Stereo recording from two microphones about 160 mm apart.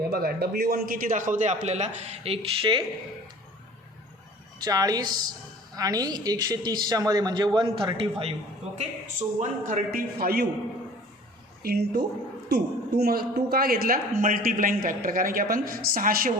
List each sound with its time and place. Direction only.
0.1 s speech: 75° right (ahead or behind); by 2.8 s 35° right (ahead or behind)
4.6 s a man's voice: 20° right (ahead or behind)
9.4 s a man's voice: 50° right (ahead or behind); by 10.5 s 75° right (ahead or behind)
11.6 s a woman's voice: 80° right; by 16.3 s 65° right (ahead or behind)